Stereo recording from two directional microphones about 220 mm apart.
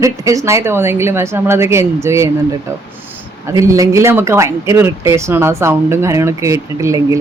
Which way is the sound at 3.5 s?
15° right (ahead or behind).